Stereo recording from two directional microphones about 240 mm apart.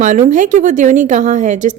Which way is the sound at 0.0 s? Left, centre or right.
Right.